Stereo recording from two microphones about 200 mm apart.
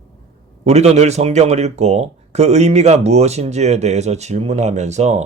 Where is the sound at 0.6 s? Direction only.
30° right (ahead or behind).